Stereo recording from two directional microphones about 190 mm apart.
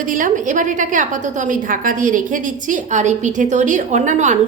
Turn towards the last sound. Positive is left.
turn(degrees=-40)  # may be behind; listen again after turning